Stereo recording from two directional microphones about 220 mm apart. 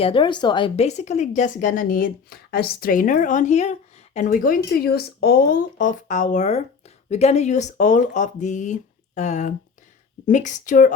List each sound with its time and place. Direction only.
0.0 s speech: 25° left (ahead or behind)